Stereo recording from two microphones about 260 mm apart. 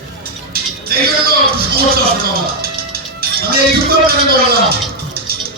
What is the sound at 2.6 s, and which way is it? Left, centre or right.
Music, right.